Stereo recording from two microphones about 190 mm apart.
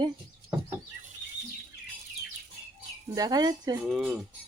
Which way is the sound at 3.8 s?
10° right (ahead or behind).